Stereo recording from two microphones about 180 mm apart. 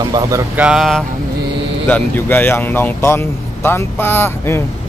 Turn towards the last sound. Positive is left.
turn(degrees=15)  # may be behind; listen again after turning